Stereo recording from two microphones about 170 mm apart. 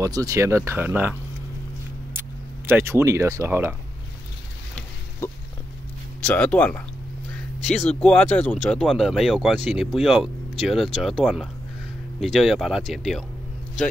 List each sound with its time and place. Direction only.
0.0 s speech: 20° right (ahead or behind)
2.1 s speech: 15° right (ahead or behind)
6.2 s speech: 10° left (ahead or behind)
8.0 s speech: 5° left (ahead or behind)